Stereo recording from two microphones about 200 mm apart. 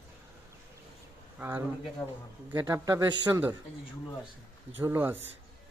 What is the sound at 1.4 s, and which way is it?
A man's voice, 10° right (ahead or behind).